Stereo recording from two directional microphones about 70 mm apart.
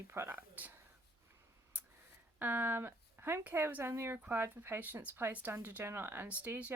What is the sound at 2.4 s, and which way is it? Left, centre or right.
Speech, right.